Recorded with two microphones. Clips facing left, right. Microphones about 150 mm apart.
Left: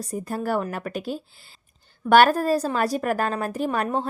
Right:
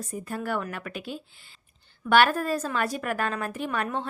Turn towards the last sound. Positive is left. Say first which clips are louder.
# left 5 dB
turn(degrees=40)  # may be behind; listen again after turning